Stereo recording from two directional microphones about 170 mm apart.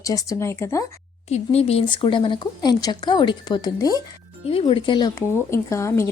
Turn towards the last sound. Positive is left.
turn(degrees=15)  # may be behind; listen again after turning